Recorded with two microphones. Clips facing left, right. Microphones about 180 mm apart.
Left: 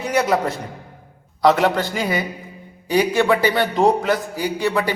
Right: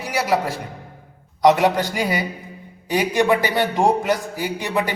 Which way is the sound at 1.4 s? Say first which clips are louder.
Right 1 dB; 15° right (ahead or behind).